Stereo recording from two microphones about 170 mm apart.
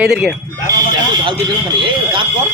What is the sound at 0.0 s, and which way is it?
Speech, 5° right (ahead or behind).